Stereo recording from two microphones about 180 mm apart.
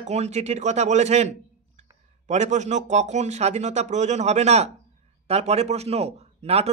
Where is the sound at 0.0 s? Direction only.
40° right (ahead or behind).